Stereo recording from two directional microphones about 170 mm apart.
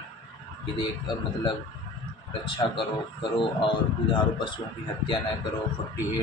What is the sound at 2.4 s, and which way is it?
A man's voice, 30° left (ahead or behind).